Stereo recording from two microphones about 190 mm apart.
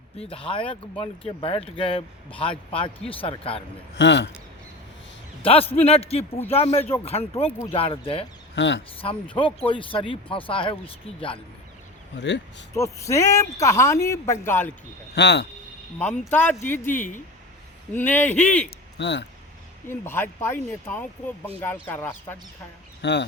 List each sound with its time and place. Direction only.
0.2 s speech: 30° left (ahead or behind)
3.9 s speech: 70° left (ahead or behind)
5.4 s a man's voice: 30° left (ahead or behind)
8.5 s speech: 70° left (ahead or behind)
9.0 s speech: 25° left (ahead or behind)
12.1 s speech: 65° left (ahead or behind)
12.7 s speech: 15° left (ahead or behind)
15.1 s speech: 65° left (ahead or behind)
16.0 s speech: 10° left (ahead or behind)
18.9 s speech: 65° left (ahead or behind)
19.9 s speech: 10° left (ahead or behind)
23.0 s speech: 65° left (ahead or behind)